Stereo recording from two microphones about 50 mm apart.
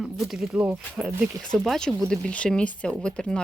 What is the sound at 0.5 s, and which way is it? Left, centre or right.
Speech, right.